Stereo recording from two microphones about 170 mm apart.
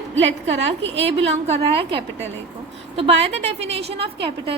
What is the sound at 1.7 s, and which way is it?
A woman's voice, 30° right (ahead or behind).